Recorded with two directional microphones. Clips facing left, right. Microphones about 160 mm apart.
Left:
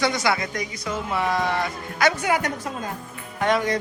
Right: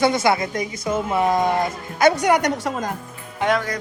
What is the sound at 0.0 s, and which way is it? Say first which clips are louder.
Speech: right 5 dB; 50° right (ahead or behind).